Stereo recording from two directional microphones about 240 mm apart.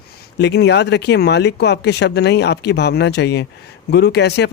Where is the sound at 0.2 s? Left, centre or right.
Left.